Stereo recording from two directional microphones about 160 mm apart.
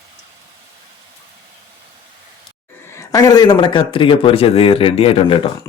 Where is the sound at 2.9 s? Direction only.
20° left (ahead or behind).